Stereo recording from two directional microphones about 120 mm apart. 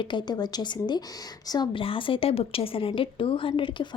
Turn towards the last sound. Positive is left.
turn(degrees=45)  # may be behind; listen again after turning